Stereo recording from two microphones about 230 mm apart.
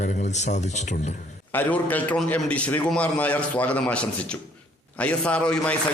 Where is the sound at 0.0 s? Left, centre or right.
Left.